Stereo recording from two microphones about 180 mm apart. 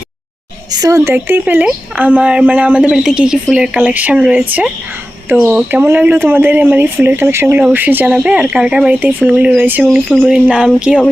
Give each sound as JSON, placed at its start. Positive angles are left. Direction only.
{"t": 0.7, "sound": "speech", "side_deg": -20}